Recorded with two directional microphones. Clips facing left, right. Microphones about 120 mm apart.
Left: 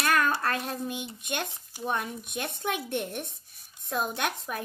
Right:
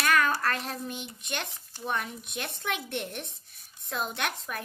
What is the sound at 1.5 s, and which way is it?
A child's voice, 20° left (ahead or behind).